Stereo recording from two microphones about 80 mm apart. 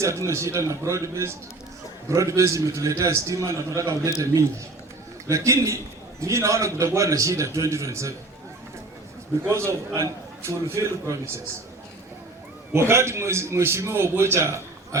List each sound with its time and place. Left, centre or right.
0.0 s a man's voice: right
5.3 s a man's voice: right
9.5 s a man's voice: right
12.9 s a man's voice: right